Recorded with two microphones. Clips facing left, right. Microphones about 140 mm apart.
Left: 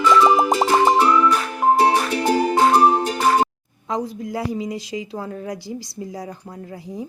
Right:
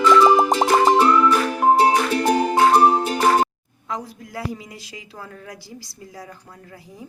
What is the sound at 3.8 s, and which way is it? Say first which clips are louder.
A woman's voice: left 6 dB; 25° left (ahead or behind).